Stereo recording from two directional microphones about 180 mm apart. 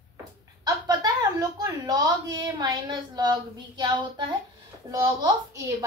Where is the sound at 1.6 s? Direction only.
20° right (ahead or behind).